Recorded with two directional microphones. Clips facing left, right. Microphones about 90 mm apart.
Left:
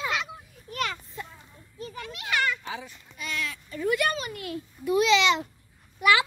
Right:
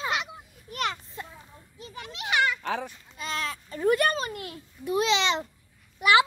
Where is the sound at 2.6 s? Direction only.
60° right (ahead or behind).